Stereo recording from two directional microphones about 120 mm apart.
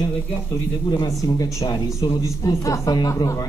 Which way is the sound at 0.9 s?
30° left (ahead or behind).